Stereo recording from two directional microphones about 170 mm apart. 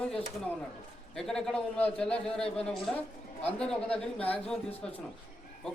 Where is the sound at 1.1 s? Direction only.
5° left (ahead or behind).